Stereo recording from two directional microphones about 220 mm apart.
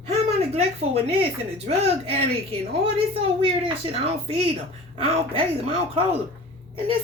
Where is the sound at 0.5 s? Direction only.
30° right (ahead or behind).